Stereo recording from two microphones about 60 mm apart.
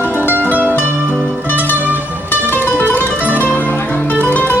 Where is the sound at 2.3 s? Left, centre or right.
Left.